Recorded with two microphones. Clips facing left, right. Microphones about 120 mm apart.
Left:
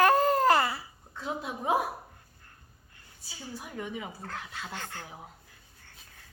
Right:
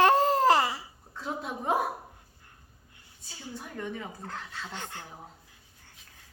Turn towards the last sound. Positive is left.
turn(degrees=-20)  # may be behind; listen again after turning